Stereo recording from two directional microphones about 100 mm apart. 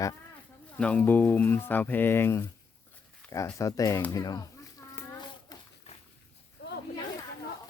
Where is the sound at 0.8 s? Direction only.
15° left (ahead or behind); by 4.4 s 40° left (ahead or behind).